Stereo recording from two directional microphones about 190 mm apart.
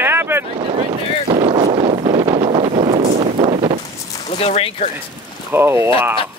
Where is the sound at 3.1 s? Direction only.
30° right (ahead or behind).